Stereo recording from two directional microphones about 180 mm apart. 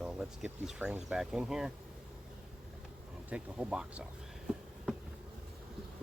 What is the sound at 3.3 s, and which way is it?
Speech, 5° right (ahead or behind).